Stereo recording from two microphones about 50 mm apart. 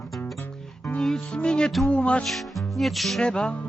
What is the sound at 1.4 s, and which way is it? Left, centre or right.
Speech, centre.